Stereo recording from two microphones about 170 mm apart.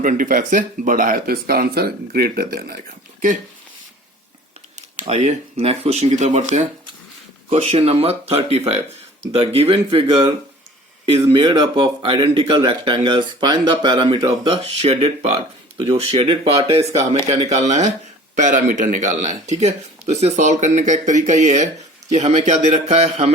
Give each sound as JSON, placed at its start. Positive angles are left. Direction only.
{"t": 0.0, "sound": "speech", "side_deg": -55}
{"t": 5.0, "sound": "speech", "side_deg": -40}